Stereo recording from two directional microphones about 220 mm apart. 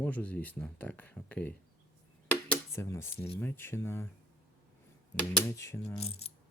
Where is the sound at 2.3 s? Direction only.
10° left (ahead or behind).